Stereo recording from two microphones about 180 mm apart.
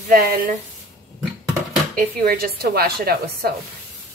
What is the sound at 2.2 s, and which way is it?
Speech, 55° right (ahead or behind).